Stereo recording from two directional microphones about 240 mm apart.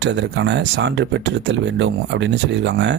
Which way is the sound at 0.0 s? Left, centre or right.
Right.